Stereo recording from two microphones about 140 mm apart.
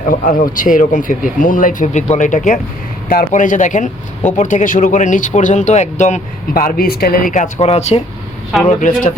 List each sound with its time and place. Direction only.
0.1 s speech: 75° left (ahead or behind)
3.1 s speech: 80° left; by 8.0 s 50° left (ahead or behind)
8.6 s speech: 75° left (ahead or behind)